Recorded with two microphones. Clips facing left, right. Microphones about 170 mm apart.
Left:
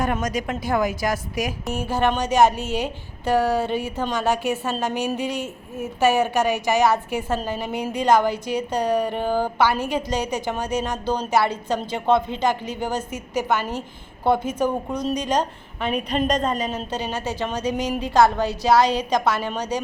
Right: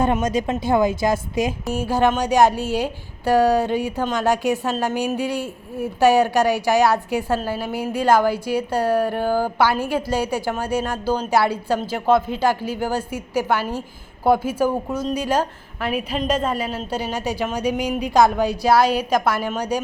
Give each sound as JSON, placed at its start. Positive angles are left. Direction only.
{"t": 0.0, "sound": "a woman's voice", "side_deg": -25}
{"t": 1.7, "sound": "a woman's voice", "side_deg": -10}